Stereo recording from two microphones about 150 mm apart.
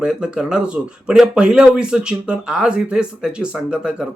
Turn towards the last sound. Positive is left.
turn(degrees=-5)  # may be behind; listen again after turning